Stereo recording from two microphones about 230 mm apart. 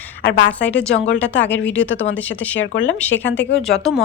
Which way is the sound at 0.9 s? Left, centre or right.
Left.